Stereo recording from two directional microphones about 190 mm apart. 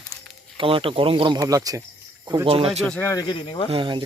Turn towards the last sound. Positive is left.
turn(degrees=-25)  # may be behind; listen again after turning